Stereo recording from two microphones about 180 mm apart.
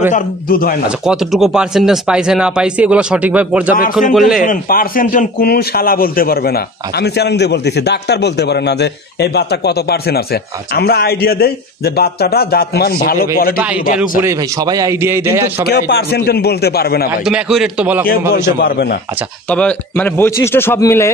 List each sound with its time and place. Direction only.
0.1 s a man's voice: 50° left (ahead or behind)
0.8 s speech: 5° right (ahead or behind)
4.4 s a man's voice: 50° left (ahead or behind)
14.2 s a man's voice: 20° right (ahead or behind)
15.6 s a man's voice: 65° left (ahead or behind)
17.2 s speech: 5° right (ahead or behind)
18.0 s a man's voice: 55° left (ahead or behind)
19.5 s speech: 5° left (ahead or behind)